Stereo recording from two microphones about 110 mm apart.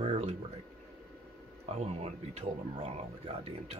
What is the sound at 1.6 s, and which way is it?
Speech, 70° right (ahead or behind).